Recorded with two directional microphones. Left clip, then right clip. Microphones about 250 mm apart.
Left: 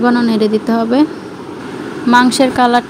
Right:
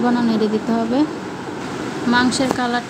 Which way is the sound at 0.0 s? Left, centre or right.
Left.